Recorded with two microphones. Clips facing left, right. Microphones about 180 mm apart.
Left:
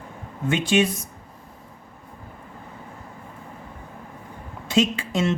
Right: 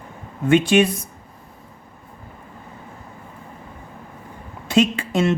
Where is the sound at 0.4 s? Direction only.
60° right (ahead or behind).